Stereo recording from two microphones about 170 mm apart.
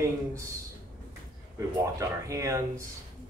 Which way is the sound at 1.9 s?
20° right (ahead or behind).